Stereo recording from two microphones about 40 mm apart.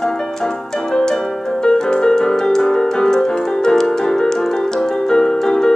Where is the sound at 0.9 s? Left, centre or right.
Centre.